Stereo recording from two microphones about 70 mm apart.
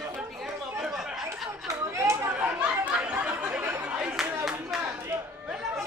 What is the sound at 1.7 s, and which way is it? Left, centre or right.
Children playing, right.